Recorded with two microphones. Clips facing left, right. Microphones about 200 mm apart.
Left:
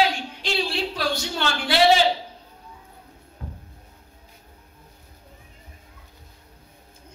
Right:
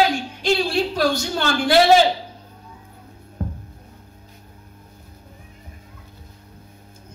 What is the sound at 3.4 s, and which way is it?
Music, 50° right (ahead or behind).